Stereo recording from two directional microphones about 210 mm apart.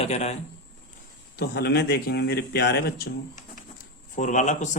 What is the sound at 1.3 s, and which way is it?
Speech, 50° left (ahead or behind).